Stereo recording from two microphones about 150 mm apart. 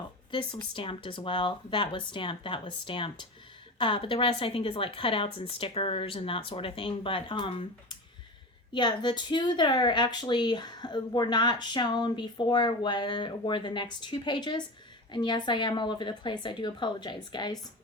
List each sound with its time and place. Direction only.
0.3 s a woman's voice: 35° left (ahead or behind)